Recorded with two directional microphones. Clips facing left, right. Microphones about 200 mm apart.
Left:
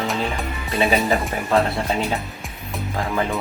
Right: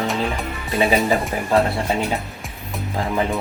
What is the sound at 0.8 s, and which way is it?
Speech, 15° right (ahead or behind).